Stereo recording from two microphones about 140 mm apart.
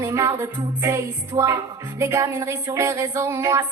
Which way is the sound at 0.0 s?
20° right (ahead or behind).